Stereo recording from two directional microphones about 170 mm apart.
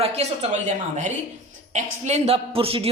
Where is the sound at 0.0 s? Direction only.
40° right (ahead or behind).